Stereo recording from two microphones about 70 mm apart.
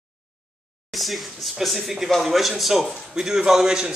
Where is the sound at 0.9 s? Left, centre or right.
Centre.